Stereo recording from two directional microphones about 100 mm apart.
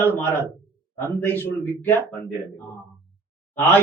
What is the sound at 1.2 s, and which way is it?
Speech, 20° left (ahead or behind).